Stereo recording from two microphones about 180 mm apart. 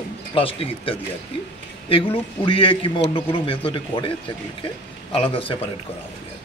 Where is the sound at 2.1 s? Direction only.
25° left (ahead or behind).